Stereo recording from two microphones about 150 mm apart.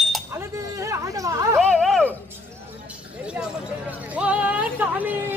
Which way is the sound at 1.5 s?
Centre (ahead or behind).